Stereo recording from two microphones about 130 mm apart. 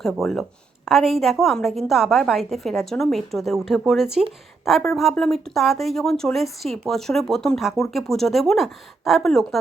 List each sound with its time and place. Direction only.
0.0 s speech: centre (ahead or behind)